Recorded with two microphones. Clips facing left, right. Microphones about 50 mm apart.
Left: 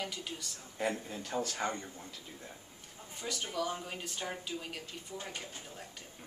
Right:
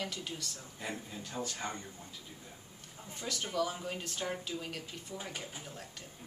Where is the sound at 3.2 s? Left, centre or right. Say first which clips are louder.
Right 2 dB; centre.